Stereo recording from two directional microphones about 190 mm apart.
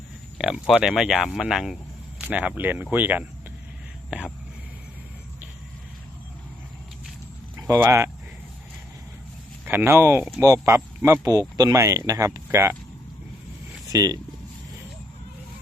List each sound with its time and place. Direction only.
0.3 s speech: 5° right (ahead or behind)
4.1 s a sound: 10° right (ahead or behind)
7.5 s speech: 15° right (ahead or behind)
9.6 s speech: 10° right (ahead or behind)
13.8 s speech: 20° right (ahead or behind)